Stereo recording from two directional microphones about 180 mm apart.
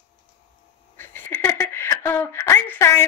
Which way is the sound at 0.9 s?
10° left (ahead or behind).